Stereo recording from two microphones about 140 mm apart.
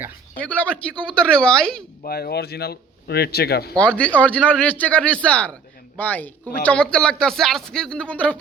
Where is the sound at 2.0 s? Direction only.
90° left.